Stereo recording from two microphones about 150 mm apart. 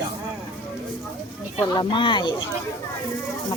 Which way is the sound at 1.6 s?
30° left (ahead or behind).